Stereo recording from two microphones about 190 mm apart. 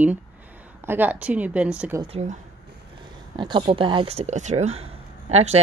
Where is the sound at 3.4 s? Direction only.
25° right (ahead or behind).